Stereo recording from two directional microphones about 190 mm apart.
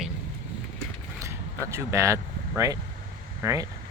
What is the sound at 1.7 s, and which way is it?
Speech, 15° right (ahead or behind).